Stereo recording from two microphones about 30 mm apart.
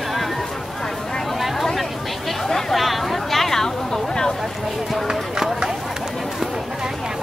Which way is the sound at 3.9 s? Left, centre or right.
Left.